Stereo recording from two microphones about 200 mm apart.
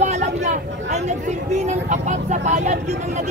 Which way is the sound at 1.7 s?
35° right (ahead or behind).